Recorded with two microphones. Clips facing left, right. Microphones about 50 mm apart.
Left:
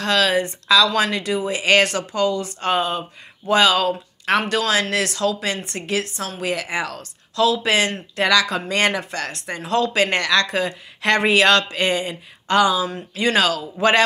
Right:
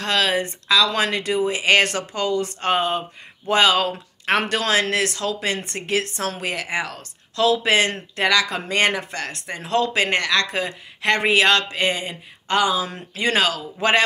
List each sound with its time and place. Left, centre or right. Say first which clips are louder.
0.0 s speech: left 2 dB; right
1.9 s speech: left 3 dB; right
4.9 s speech: left 2 dB; right
12.8 s speech: left 4 dB; right
13.2 s speech: left 2 dB; right